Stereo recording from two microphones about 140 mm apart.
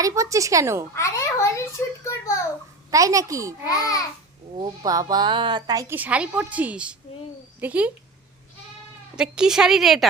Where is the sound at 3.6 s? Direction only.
25° left (ahead or behind).